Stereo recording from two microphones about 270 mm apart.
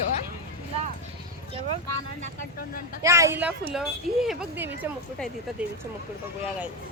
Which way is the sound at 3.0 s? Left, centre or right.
Centre.